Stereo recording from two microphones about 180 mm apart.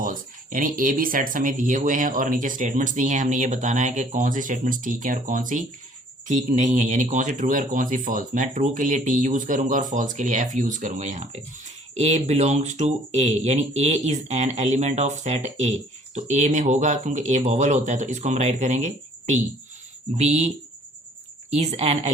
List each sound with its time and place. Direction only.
0.0 s speech: 50° right (ahead or behind)
21.5 s speech: 35° right (ahead or behind)